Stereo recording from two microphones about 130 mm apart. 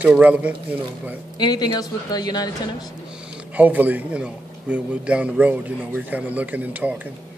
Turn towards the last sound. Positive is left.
turn(degrees=-10)  # may be behind; listen again after turning